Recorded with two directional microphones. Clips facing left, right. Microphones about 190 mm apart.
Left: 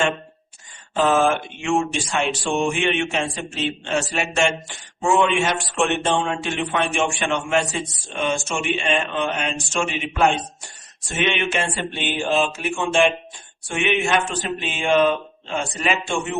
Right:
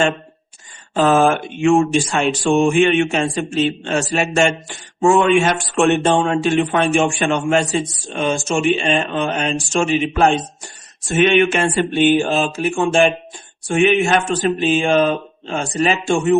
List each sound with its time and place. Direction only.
0.9 s a man's voice: 45° right (ahead or behind)